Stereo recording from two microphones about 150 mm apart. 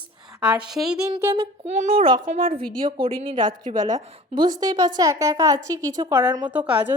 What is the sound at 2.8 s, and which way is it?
A woman's voice, 30° right (ahead or behind).